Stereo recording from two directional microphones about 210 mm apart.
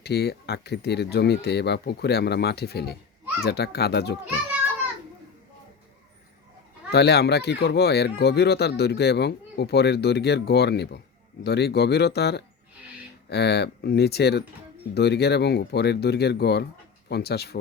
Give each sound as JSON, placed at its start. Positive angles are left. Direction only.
{"t": 0.0, "sound": "speech", "side_deg": 50}
{"t": 6.9, "sound": "speech", "side_deg": 50}